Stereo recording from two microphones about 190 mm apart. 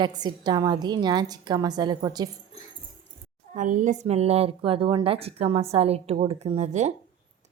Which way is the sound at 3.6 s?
40° right (ahead or behind).